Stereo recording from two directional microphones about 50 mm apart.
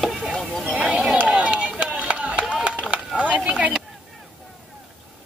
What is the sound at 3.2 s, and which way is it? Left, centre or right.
Speech, right.